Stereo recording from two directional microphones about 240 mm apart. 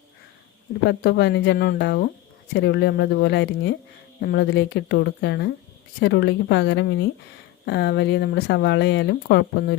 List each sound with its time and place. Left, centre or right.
0.9 s speech: left